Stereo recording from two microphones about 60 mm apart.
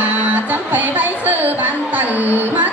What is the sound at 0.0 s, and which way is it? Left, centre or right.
Music, right.